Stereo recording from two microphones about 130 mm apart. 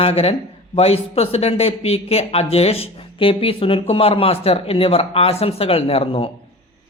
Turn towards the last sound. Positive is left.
turn(degrees=45)  # may be behind; listen again after turning